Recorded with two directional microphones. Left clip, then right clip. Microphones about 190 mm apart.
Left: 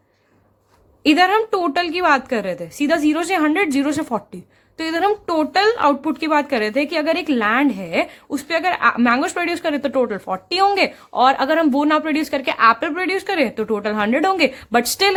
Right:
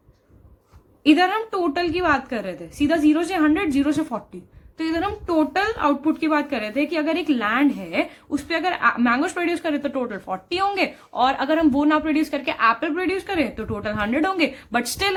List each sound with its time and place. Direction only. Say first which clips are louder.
1.0 s a woman's voice: left 3 dB; 45° left (ahead or behind)